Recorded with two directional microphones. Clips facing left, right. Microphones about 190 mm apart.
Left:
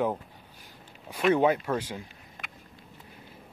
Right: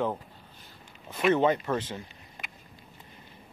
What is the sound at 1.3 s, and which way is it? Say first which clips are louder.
Speech: left 1 dB; 10° left (ahead or behind).